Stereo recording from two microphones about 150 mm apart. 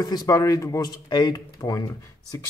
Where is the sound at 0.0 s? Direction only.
25° left (ahead or behind).